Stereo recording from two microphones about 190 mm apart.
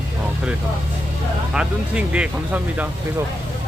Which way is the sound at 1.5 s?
5° right (ahead or behind).